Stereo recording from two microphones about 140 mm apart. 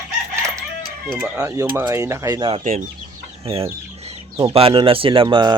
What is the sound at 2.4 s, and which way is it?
Speech, 35° right (ahead or behind).